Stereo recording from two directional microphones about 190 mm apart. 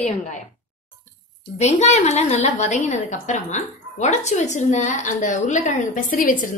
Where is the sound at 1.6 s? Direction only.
35° left (ahead or behind).